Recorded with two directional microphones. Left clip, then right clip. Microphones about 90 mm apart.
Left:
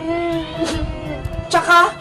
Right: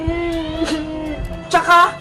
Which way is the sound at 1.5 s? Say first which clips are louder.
Right 1 dB; 30° right (ahead or behind).